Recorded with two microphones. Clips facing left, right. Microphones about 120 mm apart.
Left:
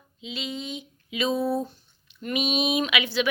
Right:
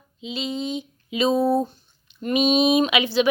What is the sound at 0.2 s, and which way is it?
Speech, 25° right (ahead or behind).